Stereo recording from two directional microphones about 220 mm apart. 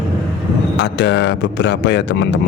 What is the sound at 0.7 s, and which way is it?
Speech, 50° left (ahead or behind).